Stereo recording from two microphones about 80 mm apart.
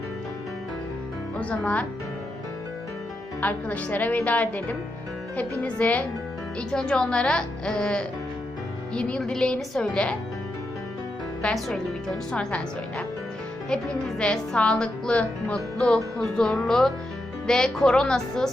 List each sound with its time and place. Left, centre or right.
1.4 s speech: centre
3.4 s a woman's voice: centre
11.4 s speech: centre
14.2 s speech: centre